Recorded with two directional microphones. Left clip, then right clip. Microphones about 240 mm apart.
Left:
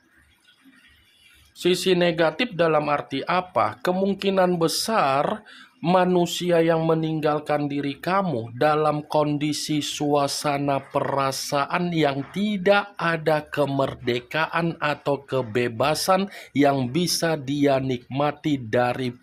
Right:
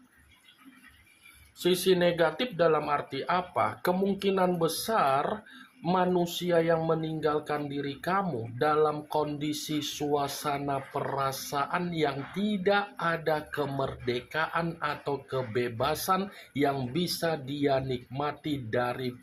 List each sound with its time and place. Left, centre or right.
1.5 s speech: left